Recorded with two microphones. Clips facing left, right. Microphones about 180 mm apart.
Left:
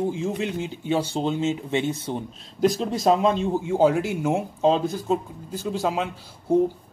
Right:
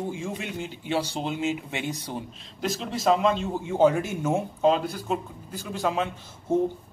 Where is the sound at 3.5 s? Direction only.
15° left (ahead or behind).